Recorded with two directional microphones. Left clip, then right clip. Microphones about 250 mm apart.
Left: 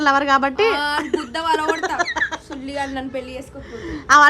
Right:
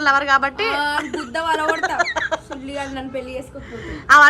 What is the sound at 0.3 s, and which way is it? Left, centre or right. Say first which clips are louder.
A woman's voice: left 1 dB; centre.